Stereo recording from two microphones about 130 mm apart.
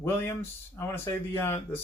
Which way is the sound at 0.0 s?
20° left (ahead or behind).